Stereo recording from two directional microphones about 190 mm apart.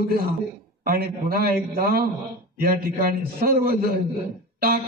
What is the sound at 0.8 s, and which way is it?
A man's voice, 50° right (ahead or behind).